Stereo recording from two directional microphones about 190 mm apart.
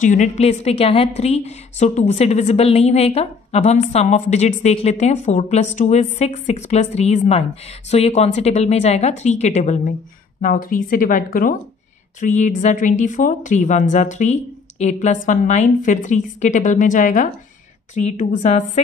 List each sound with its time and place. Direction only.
0.0 s a woman's voice: 40° left (ahead or behind)